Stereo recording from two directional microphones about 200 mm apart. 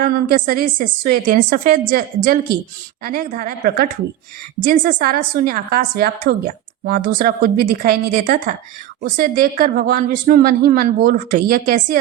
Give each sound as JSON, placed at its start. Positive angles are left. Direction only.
{"t": 0.0, "sound": "a woman's voice", "side_deg": -50}